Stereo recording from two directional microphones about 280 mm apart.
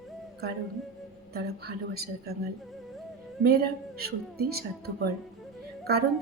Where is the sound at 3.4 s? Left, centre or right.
Right.